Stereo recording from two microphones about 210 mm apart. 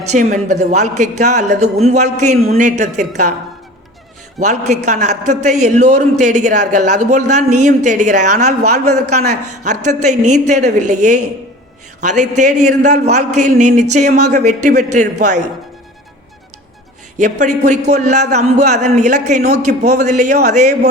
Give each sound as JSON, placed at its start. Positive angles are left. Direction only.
{"t": 0.1, "sound": "a man's voice", "side_deg": -35}
{"t": 4.4, "sound": "a man's voice", "side_deg": -35}
{"t": 11.9, "sound": "a man's voice", "side_deg": -35}
{"t": 17.4, "sound": "a man's voice", "side_deg": -35}